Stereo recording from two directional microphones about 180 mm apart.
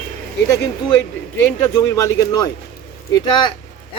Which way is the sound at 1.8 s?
15° left (ahead or behind).